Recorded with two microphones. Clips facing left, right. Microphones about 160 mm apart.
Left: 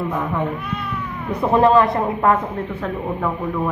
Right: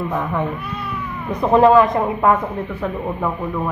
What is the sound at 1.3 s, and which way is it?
Speech, 20° right (ahead or behind).